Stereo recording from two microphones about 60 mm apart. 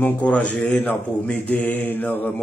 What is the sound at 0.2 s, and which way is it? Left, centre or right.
Speech, centre.